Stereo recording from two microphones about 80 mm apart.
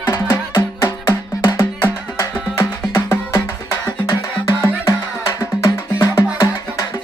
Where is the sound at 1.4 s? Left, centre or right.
Left.